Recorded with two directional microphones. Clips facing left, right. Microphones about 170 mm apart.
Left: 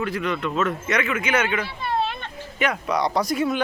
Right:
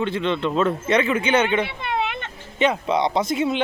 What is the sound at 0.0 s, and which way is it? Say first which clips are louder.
A woman's voice: right 3 dB; 25° right (ahead or behind).